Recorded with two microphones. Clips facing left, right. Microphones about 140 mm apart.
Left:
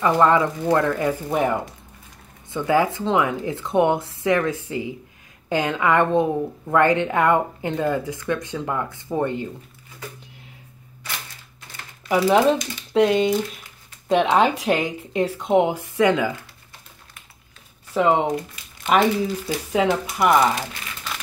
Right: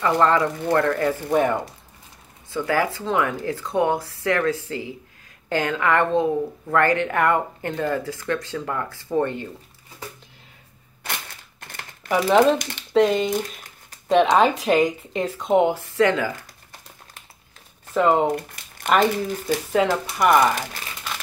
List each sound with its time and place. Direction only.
0.0 s a woman's voice: 15° left (ahead or behind)
2.5 s a woman's voice: 20° left (ahead or behind)
12.1 s speech: centre (ahead or behind)
14.3 s speech: 10° left (ahead or behind)
15.7 s speech: 15° left (ahead or behind)
17.9 s a woman's voice: 10° left (ahead or behind)